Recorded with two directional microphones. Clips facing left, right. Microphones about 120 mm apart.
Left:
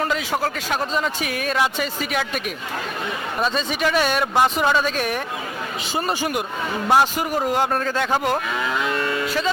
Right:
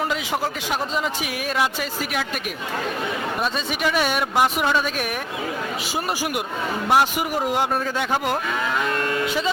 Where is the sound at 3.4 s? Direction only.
5° right (ahead or behind).